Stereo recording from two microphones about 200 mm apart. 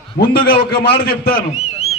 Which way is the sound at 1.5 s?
30° left (ahead or behind).